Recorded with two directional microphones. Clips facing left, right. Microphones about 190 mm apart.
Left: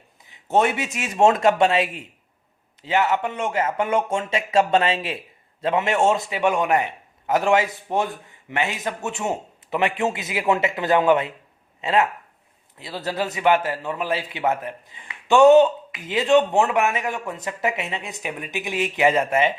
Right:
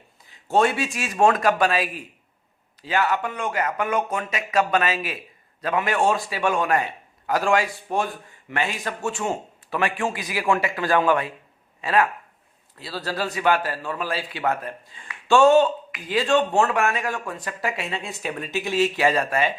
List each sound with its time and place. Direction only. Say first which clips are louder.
0.3 s a man's voice: even; 20° left (ahead or behind)